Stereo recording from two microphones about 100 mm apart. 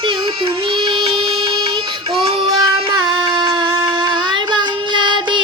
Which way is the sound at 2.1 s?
85° right.